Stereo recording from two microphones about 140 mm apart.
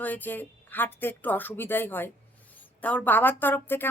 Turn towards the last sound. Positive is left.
turn(degrees=15)  # may be behind; listen again after turning